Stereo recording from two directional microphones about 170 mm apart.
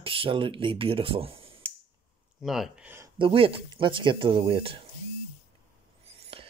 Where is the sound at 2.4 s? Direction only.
Centre (ahead or behind).